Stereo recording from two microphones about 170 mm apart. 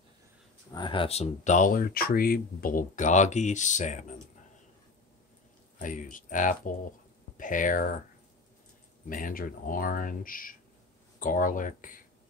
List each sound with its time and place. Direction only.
0.7 s speech: 30° left (ahead or behind); by 4.0 s 45° left (ahead or behind)
5.8 s speech: 50° left (ahead or behind)
9.1 s speech: 55° left (ahead or behind)